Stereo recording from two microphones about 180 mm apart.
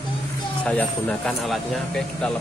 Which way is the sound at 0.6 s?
5° left (ahead or behind).